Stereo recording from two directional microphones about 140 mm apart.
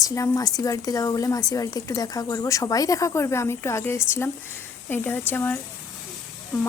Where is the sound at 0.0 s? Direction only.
25° left (ahead or behind).